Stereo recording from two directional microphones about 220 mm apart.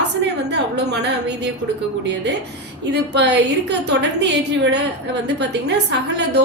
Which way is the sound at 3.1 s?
50° right (ahead or behind).